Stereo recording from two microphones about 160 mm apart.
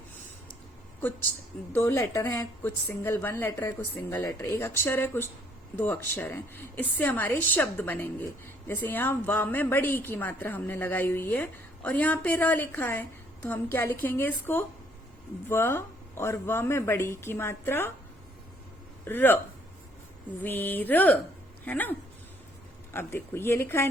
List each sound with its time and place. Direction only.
1.7 s a woman's voice: 15° left (ahead or behind)
19.0 s a woman's voice: 15° left (ahead or behind)
20.4 s a woman's voice: 10° left (ahead or behind)